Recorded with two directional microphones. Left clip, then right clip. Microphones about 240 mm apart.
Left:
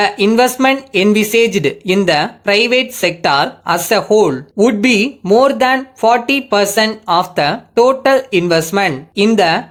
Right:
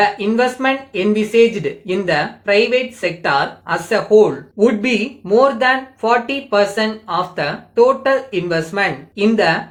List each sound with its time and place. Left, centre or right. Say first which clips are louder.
0.0 s speech: left 3 dB; left